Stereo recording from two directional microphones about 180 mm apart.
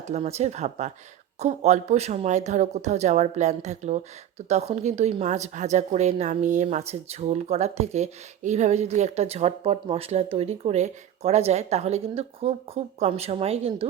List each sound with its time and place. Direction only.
0.0 s a woman's voice: 35° right (ahead or behind)